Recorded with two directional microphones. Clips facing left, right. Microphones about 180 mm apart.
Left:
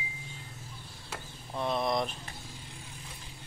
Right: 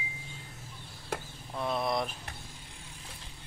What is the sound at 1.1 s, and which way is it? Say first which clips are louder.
Chop: right 7 dB; 55° right (ahead or behind).